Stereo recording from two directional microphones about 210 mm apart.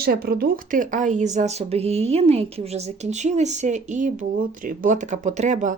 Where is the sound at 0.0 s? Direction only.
45° right (ahead or behind).